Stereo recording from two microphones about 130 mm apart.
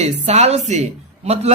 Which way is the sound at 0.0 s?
60° right (ahead or behind).